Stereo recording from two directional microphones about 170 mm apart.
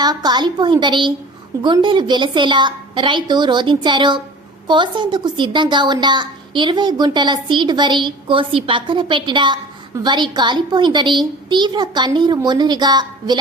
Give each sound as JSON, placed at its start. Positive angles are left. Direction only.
{"t": 0.0, "sound": "a woman's voice", "side_deg": -25}